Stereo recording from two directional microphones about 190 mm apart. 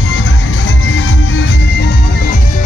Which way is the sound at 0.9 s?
85° left.